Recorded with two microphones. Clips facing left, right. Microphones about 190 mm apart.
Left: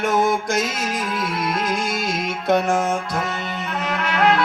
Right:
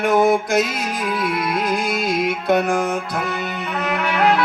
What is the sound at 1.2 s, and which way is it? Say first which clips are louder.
Music: right 3 dB; centre (ahead or behind).